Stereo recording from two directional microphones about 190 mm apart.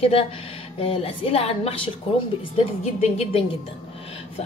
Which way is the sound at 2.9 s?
35° left (ahead or behind).